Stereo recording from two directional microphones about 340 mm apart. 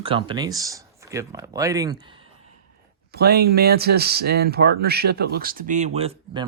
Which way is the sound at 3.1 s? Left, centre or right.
Right.